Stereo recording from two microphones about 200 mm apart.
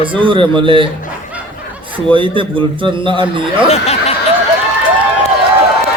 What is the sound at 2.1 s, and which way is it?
Speech, 25° right (ahead or behind).